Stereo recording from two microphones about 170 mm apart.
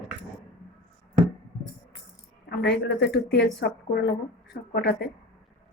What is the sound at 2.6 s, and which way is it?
A woman's voice, 80° left.